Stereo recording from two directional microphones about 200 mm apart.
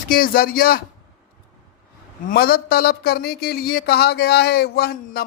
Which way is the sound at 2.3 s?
50° left (ahead or behind).